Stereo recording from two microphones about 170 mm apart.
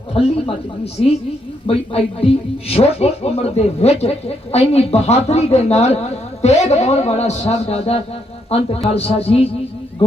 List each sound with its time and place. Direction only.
0.1 s speech: 35° left (ahead or behind)
1.6 s speech: 35° left (ahead or behind)